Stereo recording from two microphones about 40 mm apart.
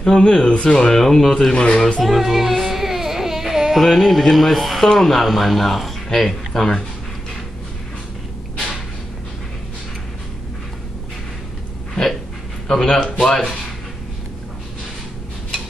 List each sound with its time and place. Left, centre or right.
0.2 s speech: centre
1.5 s speech: left
2.0 s a sound: centre
3.8 s speech: centre
11.9 s a sound: centre
12.6 s speech: centre